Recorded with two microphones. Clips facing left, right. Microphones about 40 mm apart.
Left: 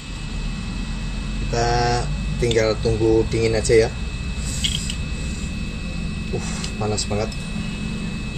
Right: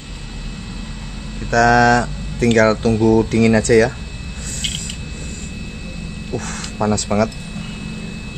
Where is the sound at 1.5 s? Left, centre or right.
Right.